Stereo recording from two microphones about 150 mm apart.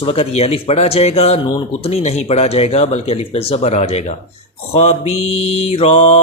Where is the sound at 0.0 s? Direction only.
40° left (ahead or behind).